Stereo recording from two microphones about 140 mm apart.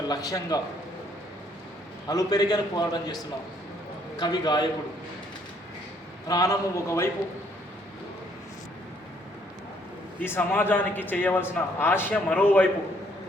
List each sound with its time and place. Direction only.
0.1 s a man's voice: 25° left (ahead or behind)
2.0 s a man's voice: 25° left (ahead or behind)
4.2 s a man's voice: 30° left (ahead or behind)
6.2 s a man's voice: 25° left (ahead or behind)
10.2 s a man's voice: 15° left (ahead or behind)